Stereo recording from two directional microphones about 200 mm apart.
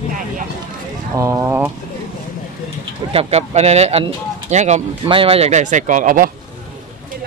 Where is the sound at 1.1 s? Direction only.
15° right (ahead or behind).